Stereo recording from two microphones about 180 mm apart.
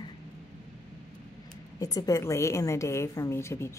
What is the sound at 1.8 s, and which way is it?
A woman's voice, 20° left (ahead or behind).